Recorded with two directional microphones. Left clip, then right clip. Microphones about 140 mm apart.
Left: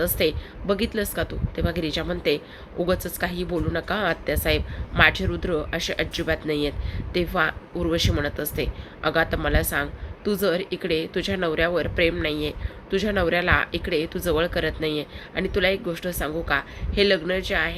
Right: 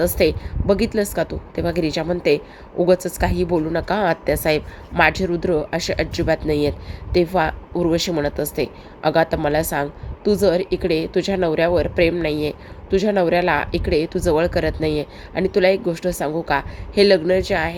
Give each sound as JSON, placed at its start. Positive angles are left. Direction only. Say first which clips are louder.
{"t": 0.0, "sound": "speech", "louder": "right 5 dB", "side_deg": -45}